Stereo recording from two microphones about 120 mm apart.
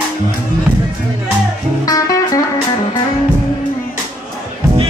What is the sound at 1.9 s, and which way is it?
Music, 30° left (ahead or behind).